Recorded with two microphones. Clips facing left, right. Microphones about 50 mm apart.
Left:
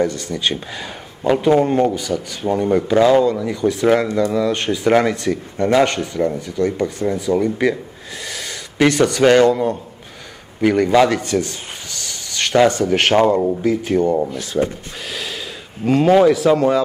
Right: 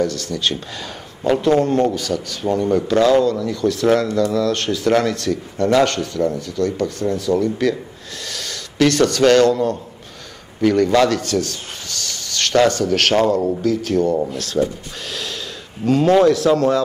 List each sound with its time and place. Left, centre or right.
0.0 s a man's voice: left
15.0 s a sound: centre
15.8 s speech: centre